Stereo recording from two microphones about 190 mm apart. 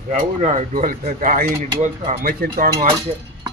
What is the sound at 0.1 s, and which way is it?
A man's voice, 40° right (ahead or behind).